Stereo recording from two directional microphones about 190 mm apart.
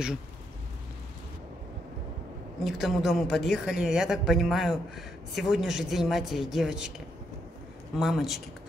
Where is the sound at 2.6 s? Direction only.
Centre (ahead or behind).